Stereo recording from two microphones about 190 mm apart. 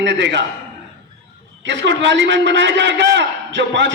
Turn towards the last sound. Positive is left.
turn(degrees=-70)  # may be behind; listen again after turning